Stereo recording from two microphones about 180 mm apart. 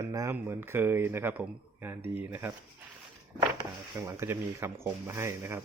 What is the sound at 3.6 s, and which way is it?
Speech, 15° right (ahead or behind).